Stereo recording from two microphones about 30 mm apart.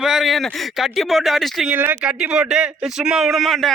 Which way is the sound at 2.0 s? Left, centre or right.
Right.